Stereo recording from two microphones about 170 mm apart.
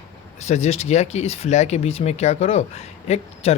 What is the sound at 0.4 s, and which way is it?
Speech, 40° left (ahead or behind).